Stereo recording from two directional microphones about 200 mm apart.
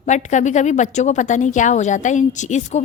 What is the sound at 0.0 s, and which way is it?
A woman's voice, 35° left (ahead or behind).